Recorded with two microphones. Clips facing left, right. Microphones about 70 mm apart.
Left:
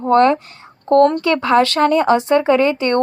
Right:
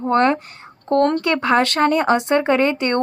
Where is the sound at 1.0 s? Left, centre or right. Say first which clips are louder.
Left 3 dB; right.